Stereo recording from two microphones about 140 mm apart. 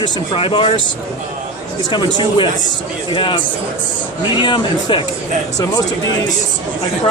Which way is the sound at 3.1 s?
35° left (ahead or behind).